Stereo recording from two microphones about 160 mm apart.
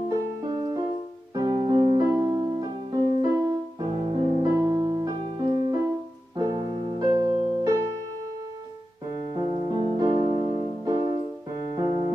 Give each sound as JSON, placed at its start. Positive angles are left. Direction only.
{"t": 1.3, "sound": "music", "side_deg": -25}
{"t": 1.7, "sound": "keyboard", "side_deg": -25}
{"t": 3.2, "sound": "music", "side_deg": -30}
{"t": 9.3, "sound": "music", "side_deg": -35}